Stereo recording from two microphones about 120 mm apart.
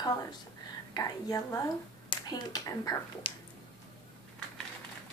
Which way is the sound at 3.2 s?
50° left (ahead or behind).